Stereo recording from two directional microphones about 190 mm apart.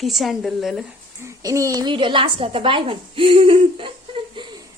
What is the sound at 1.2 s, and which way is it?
A woman's voice, 15° right (ahead or behind).